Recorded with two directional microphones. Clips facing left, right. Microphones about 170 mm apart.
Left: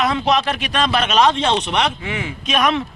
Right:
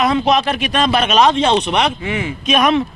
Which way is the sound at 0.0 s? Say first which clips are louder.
Right 3 dB; 15° right (ahead or behind).